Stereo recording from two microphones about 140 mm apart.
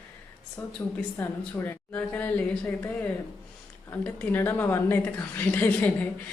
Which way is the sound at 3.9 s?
15° left (ahead or behind).